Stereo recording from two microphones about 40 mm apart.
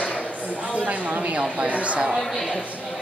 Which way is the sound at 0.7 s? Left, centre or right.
Right.